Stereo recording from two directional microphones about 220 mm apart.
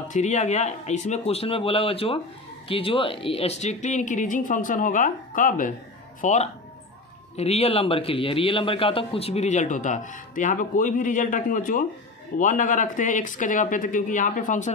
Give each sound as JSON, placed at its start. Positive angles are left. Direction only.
{"t": 0.1, "sound": "a man's voice", "side_deg": 30}